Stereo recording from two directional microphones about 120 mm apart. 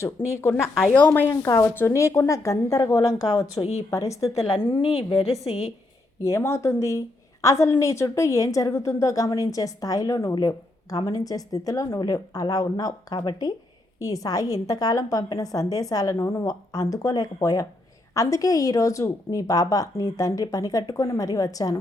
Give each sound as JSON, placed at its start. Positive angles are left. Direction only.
{"t": 0.4, "sound": "a woman's voice", "side_deg": 20}
{"t": 0.9, "sound": "speech", "side_deg": 10}
{"t": 1.3, "sound": "a woman's voice", "side_deg": 25}
{"t": 3.6, "sound": "speech", "side_deg": 65}
{"t": 3.8, "sound": "a woman's voice", "side_deg": 25}
{"t": 4.6, "sound": "a woman's voice", "side_deg": 40}
{"t": 6.2, "sound": "a woman's voice", "side_deg": 25}